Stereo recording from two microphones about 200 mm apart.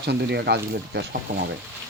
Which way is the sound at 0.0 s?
55° right (ahead or behind).